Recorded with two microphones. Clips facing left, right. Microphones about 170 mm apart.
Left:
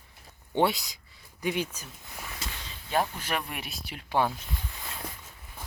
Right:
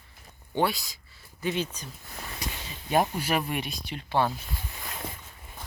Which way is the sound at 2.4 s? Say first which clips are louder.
Right 4 dB; 20° right (ahead or behind).